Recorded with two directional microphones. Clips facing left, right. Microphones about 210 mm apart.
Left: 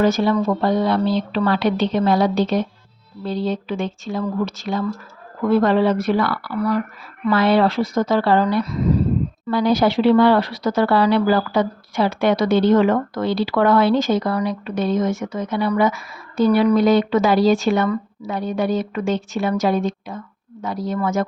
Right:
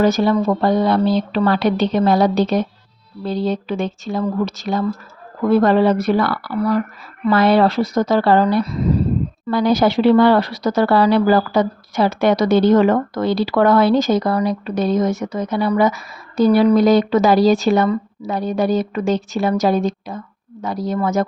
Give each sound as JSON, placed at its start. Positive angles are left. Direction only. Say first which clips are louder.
{"t": 0.0, "sound": "speech", "louder": "right 2 dB", "side_deg": -40}
{"t": 9.5, "sound": "speech", "louder": "right 2 dB", "side_deg": -45}